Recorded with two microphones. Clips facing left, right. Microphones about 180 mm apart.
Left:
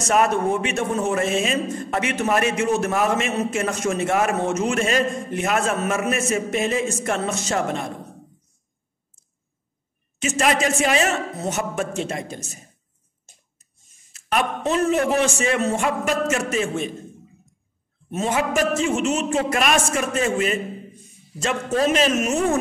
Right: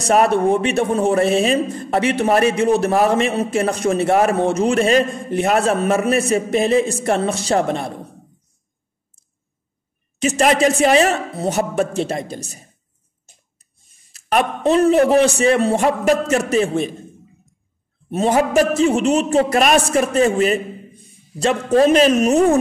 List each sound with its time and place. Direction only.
0.0 s speech: 35° right (ahead or behind)
10.1 s speech: 35° right (ahead or behind)
13.6 s a man's voice: 35° right (ahead or behind)
18.1 s speech: 35° right (ahead or behind)